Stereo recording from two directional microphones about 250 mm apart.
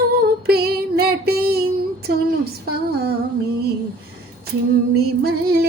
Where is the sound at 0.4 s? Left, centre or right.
Right.